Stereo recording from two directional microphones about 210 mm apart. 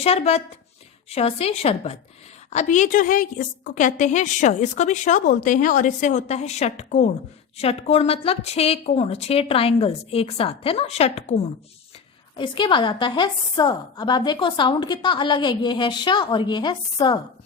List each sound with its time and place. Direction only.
0.0 s a woman's voice: 30° left (ahead or behind)
12.4 s a woman's voice: 20° left (ahead or behind)